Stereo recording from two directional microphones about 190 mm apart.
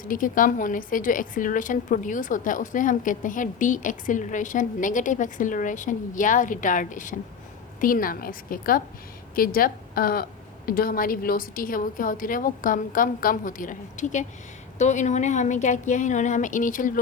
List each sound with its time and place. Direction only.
0.0 s a woman's voice: 45° left (ahead or behind)